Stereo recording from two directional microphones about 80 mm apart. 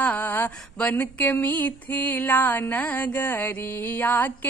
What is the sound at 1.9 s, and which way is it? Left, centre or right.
Mantra, left.